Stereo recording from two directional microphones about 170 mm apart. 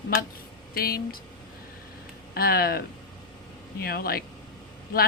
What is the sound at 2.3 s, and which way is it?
Speech, 65° left (ahead or behind).